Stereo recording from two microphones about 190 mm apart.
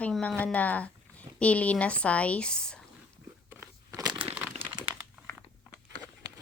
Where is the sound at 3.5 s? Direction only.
10° right (ahead or behind).